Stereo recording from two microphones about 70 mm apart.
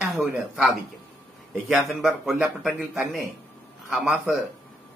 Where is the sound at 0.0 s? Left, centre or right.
Centre.